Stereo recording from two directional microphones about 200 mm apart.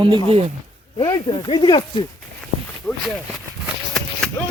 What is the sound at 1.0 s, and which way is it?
Speech, 20° left (ahead or behind).